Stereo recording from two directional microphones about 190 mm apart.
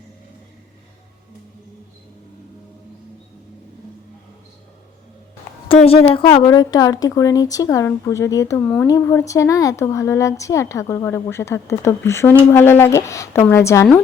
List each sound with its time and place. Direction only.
5.6 s a woman's voice: 30° left (ahead or behind); by 13.8 s 15° left (ahead or behind)